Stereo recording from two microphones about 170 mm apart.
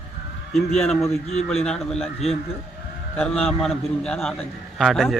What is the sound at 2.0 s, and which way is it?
Speech, 35° left (ahead or behind).